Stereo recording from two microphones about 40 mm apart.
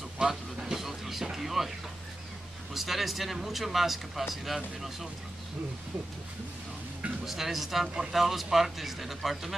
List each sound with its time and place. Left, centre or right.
0.2 s speech: centre
2.7 s a man's voice: centre
7.2 s a man's voice: centre